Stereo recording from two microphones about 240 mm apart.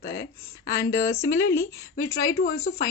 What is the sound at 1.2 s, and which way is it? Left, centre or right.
A woman's voice, left.